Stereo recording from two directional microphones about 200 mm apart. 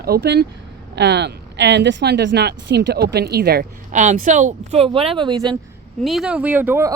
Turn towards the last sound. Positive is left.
turn(degrees=-10)  # may be behind; listen again after turning